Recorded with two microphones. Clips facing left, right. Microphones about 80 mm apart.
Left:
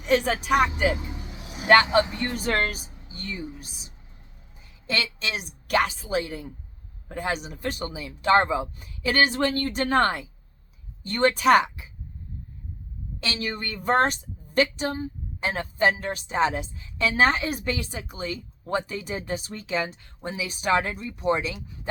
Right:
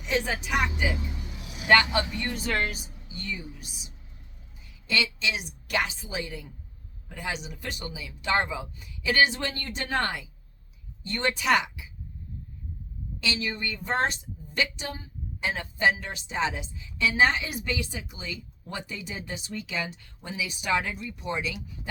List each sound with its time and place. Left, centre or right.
0.0 s a woman's voice: left
1.5 s speech: left
2.3 s speech: left
4.9 s a woman's voice: left
13.1 s a woman's voice: left